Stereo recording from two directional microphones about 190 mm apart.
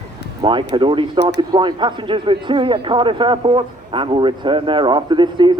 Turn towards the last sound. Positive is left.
turn(degrees=-25)  # may be behind; listen again after turning